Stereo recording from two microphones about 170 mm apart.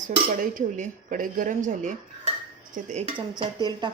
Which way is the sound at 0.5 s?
55° right (ahead or behind).